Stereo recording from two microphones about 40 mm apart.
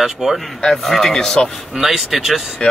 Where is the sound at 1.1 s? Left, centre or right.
Centre.